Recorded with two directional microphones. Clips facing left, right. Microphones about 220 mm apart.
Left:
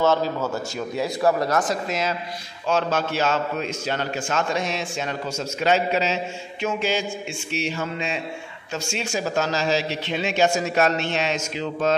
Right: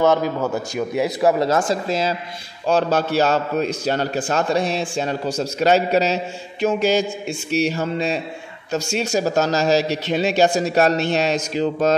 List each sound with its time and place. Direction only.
0.0 s a man's voice: 15° right (ahead or behind); by 11.9 s 40° right (ahead or behind)